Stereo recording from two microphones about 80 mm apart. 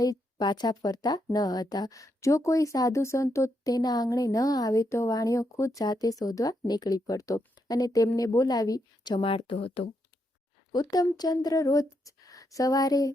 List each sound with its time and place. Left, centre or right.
0.0 s a sound: left
0.4 s speech: left
5.8 s a woman's voice: left
10.7 s speech: left